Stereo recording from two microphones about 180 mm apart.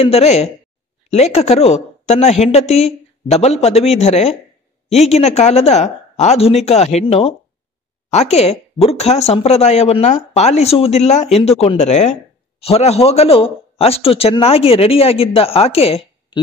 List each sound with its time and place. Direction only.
0.0 s speech: 35° left (ahead or behind)